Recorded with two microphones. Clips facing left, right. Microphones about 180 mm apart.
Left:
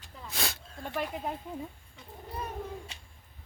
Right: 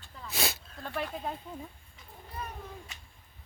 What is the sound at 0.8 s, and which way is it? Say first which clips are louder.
Speech: left 1 dB; 10° left (ahead or behind).